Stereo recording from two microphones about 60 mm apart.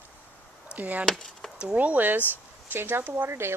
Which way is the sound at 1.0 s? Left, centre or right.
Centre.